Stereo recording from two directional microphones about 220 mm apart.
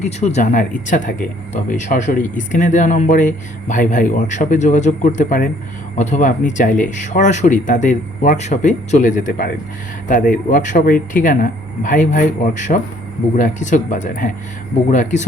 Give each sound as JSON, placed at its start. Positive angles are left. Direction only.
{"t": 0.0, "sound": "speech", "side_deg": 30}